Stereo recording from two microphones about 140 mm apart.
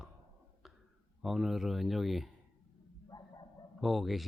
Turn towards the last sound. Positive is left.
turn(degrees=0)  # may be behind; listen again after turning